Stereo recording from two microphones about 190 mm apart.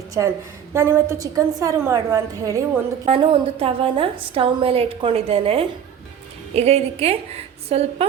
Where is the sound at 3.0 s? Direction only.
30° right (ahead or behind).